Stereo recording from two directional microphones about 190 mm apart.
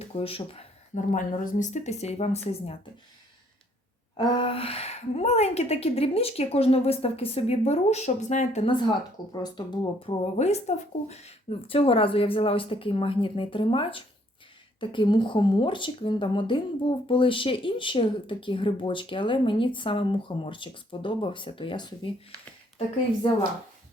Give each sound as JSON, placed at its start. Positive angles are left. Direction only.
{"t": 0.2, "sound": "a woman's voice", "side_deg": 30}
{"t": 4.2, "sound": "a woman's voice", "side_deg": 25}
{"t": 9.3, "sound": "speech", "side_deg": 20}
{"t": 10.3, "sound": "speech", "side_deg": 35}